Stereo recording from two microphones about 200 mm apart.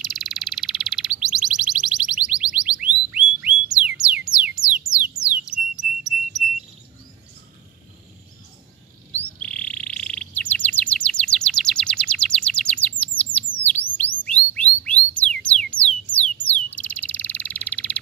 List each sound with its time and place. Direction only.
0.0 s frog: centre (ahead or behind)
4.8 s music: 5° right (ahead or behind)
5.4 s bird: 5° right (ahead or behind)
9.4 s chirp: 5° left (ahead or behind)
13.9 s chirp tone: 5° left (ahead or behind)